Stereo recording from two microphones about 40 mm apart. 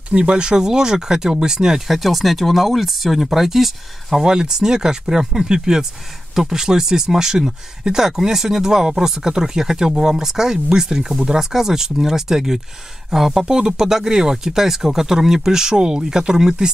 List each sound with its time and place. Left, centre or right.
0.1 s speech: right
1.9 s speech: centre
4.2 s speech: centre